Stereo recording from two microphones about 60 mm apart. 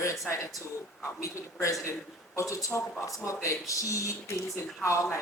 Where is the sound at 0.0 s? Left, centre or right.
Left.